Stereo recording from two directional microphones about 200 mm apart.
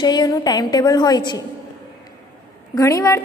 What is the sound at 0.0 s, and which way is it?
A woman's voice, 20° left (ahead or behind).